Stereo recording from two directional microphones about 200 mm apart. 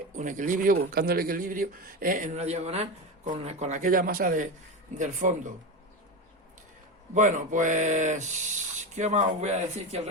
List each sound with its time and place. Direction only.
0.2 s speech: 40° right (ahead or behind)
7.1 s speech: 40° right (ahead or behind)